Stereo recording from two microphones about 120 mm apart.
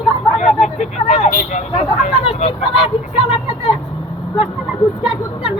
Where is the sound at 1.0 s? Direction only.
80° left.